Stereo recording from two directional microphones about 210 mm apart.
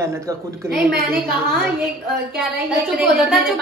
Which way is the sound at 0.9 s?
45° right (ahead or behind).